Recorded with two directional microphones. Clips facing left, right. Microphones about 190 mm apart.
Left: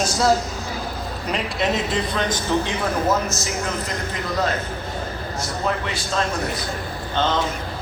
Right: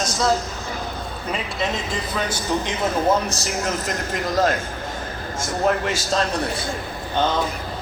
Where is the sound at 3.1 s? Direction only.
35° right (ahead or behind).